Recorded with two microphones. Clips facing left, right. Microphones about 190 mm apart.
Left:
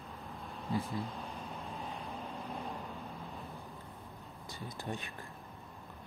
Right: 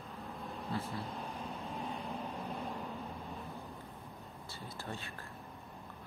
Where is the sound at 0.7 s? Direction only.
15° left (ahead or behind).